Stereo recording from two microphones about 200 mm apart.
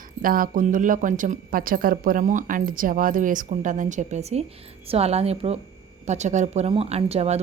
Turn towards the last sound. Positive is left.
turn(degrees=-30)  # may be behind; listen again after turning